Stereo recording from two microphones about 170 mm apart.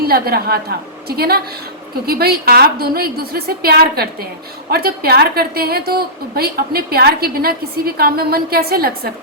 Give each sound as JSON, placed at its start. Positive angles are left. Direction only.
{"t": 0.0, "sound": "a woman's voice", "side_deg": -65}